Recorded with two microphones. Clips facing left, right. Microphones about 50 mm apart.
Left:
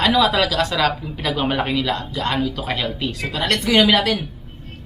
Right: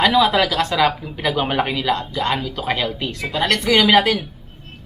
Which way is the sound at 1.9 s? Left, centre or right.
Right.